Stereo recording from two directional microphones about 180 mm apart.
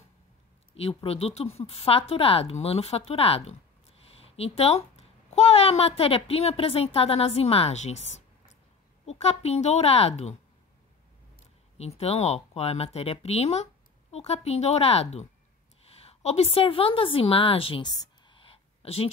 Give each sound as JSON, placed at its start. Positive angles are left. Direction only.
{"t": 0.7, "sound": "a child's voice", "side_deg": 35}
{"t": 11.8, "sound": "a woman's voice", "side_deg": 35}